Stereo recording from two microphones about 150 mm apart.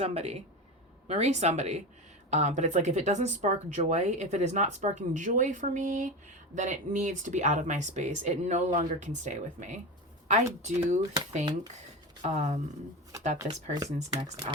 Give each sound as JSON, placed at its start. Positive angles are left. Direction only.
{"t": 0.0, "sound": "speech", "side_deg": -45}
{"t": 12.2, "sound": "speech", "side_deg": -50}
{"t": 13.8, "sound": "speech", "side_deg": -45}